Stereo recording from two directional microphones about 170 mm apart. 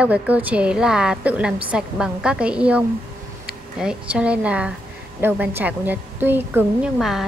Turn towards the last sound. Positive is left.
turn(degrees=0)  # may be behind; listen again after turning